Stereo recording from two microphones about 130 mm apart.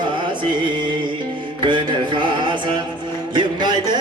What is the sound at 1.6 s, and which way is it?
Music, 40° right (ahead or behind).